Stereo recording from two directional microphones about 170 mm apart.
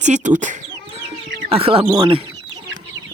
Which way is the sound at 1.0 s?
35° right (ahead or behind).